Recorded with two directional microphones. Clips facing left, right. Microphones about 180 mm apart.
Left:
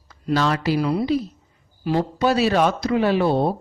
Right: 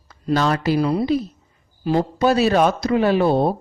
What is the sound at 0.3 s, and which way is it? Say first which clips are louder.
Speech: right 2 dB; 45° right (ahead or behind).